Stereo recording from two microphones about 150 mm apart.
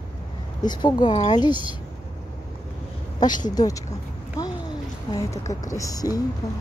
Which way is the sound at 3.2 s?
25° left (ahead or behind).